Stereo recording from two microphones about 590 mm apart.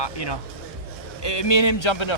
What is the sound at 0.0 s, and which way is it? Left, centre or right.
Speech, left.